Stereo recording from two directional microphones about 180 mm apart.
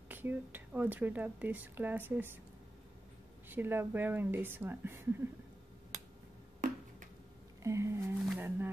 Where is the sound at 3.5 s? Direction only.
10° right (ahead or behind).